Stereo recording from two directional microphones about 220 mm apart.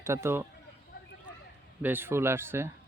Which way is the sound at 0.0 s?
10° right (ahead or behind).